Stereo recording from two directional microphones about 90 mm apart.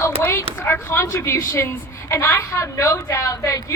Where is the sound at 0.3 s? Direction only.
30° left (ahead or behind).